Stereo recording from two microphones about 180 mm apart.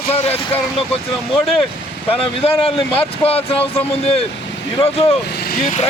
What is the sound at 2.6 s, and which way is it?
Speech, 30° left (ahead or behind).